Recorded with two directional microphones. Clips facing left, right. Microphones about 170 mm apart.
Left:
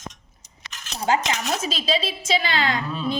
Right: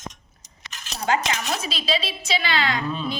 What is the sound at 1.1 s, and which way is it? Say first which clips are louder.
A woman's voice: left 1 dB; 40° left (ahead or behind).